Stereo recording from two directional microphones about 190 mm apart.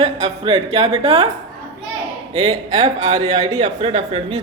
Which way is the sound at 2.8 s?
35° right (ahead or behind).